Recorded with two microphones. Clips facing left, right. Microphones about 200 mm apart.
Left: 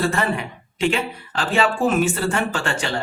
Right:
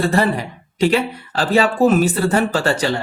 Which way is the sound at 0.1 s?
35° right (ahead or behind).